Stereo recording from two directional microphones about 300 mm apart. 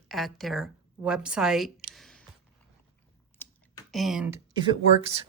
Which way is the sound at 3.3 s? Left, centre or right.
Centre.